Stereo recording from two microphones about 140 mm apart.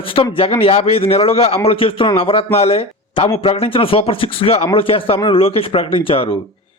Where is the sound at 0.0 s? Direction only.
40° left (ahead or behind).